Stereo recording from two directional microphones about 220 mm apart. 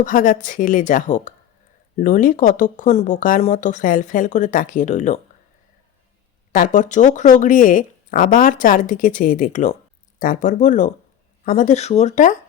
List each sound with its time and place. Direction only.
0.0 s speech: 40° left (ahead or behind)
6.5 s speech: 35° left (ahead or behind)